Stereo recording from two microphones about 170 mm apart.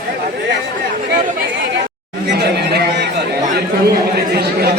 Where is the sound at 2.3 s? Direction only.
75° right (ahead or behind).